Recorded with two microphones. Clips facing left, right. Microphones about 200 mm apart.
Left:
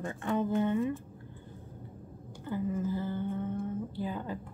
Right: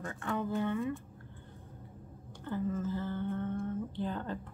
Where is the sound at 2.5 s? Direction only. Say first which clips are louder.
Left 2 dB; 10° left (ahead or behind).